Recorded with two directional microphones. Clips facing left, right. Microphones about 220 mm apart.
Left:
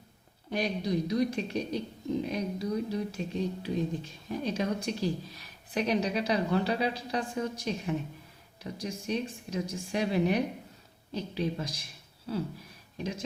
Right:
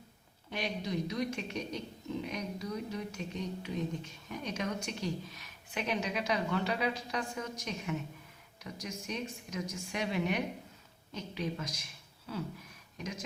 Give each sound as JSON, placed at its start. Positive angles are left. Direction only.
{"t": 0.5, "sound": "speech", "side_deg": 35}